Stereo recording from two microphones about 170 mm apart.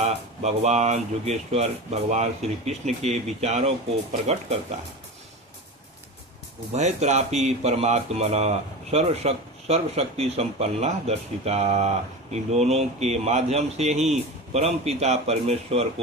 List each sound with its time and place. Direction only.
0.0 s speech: 40° right (ahead or behind)
6.7 s speech: 40° right (ahead or behind)